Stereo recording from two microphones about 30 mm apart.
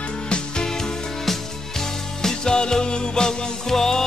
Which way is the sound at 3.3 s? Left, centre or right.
Centre.